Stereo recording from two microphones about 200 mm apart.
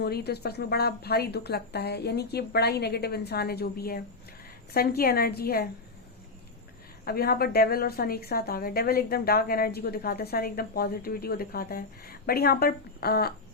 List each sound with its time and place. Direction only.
0.0 s a woman's voice: 55° left (ahead or behind)
7.0 s a woman's voice: 50° left (ahead or behind)